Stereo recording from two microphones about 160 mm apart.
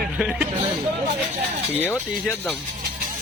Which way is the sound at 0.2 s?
5° right (ahead or behind).